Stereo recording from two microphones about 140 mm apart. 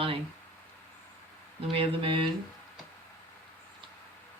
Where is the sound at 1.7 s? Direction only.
40° right (ahead or behind).